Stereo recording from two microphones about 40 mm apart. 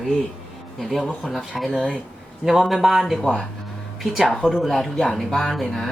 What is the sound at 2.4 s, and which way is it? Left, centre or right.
Speech, centre.